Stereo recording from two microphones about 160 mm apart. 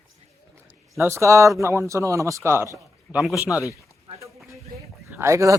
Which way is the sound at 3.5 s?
20° left (ahead or behind).